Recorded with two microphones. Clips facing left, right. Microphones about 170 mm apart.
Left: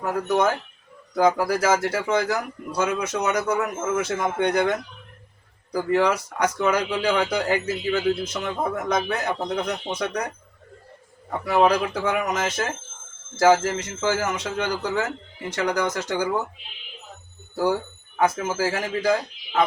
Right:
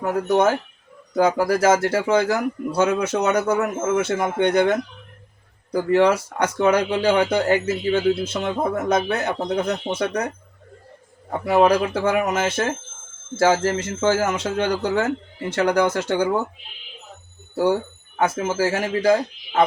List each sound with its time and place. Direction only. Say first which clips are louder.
0.0 s speech: right 3 dB; 25° right (ahead or behind)
11.3 s speech: right 3 dB; 30° right (ahead or behind)
17.5 s speech: right 3 dB; 25° right (ahead or behind)